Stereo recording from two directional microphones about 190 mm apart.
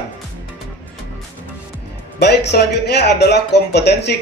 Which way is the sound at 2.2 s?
60° left (ahead or behind).